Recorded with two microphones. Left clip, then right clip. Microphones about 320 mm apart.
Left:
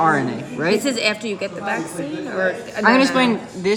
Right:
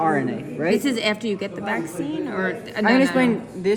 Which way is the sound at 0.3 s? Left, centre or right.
Left.